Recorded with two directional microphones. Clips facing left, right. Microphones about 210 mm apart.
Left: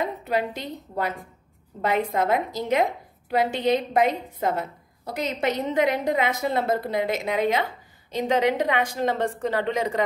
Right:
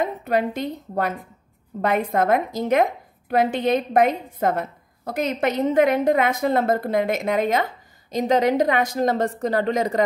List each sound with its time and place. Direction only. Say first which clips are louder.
0.0 s a woman's voice: right 4 dB; 55° right (ahead or behind)